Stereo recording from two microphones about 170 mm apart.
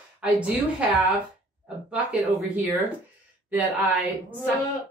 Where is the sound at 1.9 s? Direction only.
10° right (ahead or behind).